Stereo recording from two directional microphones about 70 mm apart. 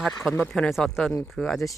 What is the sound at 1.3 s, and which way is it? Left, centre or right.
Speech, centre.